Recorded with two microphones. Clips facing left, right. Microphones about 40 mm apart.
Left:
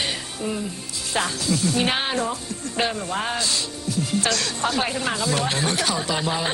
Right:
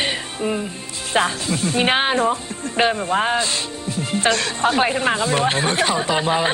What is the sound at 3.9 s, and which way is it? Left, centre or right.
Music, right.